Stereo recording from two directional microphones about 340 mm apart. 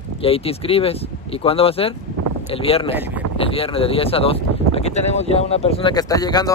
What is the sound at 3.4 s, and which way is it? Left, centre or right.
Speech, centre.